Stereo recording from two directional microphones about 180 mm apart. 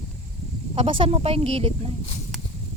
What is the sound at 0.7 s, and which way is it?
Speech, 30° right (ahead or behind).